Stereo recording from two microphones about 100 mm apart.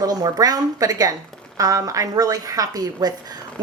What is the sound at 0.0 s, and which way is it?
Speech, 40° right (ahead or behind).